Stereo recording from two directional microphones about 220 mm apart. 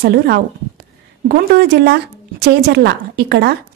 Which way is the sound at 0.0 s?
50° right (ahead or behind).